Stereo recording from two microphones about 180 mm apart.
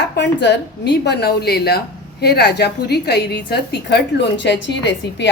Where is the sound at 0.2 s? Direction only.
70° left (ahead or behind).